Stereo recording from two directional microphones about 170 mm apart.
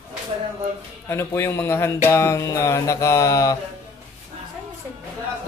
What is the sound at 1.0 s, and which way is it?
Speech, 15° left (ahead or behind).